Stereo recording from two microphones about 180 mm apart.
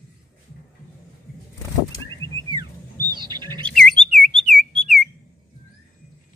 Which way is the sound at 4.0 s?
5° left (ahead or behind).